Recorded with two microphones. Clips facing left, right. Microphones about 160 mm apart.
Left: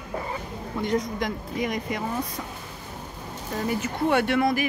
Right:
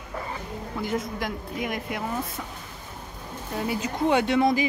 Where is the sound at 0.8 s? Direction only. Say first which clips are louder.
Left 3 dB; 5° right (ahead or behind).